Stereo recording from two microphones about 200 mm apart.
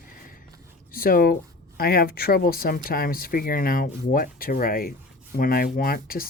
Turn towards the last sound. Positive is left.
turn(degrees=45)  # may be behind; listen again after turning